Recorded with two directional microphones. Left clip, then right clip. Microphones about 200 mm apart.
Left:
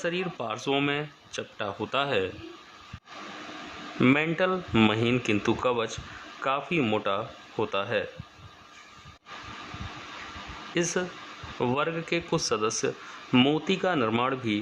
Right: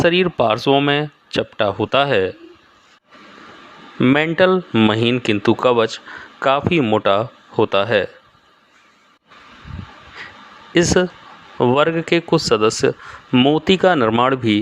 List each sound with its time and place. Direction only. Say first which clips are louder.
0.0 s speech: right 16 dB; 40° right (ahead or behind)
4.0 s speech: right 7 dB; 20° right (ahead or behind)
4.4 s speech: right 10 dB; 35° right (ahead or behind)
10.7 s speech: right 13 dB; 35° right (ahead or behind)
13.3 s speech: right 8 dB; 20° right (ahead or behind)
13.7 s speech: right 12 dB; 35° right (ahead or behind)